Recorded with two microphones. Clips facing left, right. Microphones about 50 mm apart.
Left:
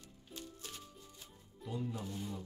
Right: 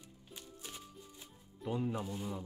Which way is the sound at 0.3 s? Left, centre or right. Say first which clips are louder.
Left 1 dB; centre.